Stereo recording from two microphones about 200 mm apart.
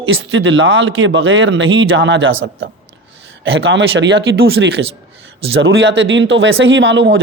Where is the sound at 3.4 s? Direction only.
70° right (ahead or behind).